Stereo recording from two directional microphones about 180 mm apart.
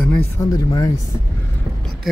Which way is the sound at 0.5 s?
20° left (ahead or behind).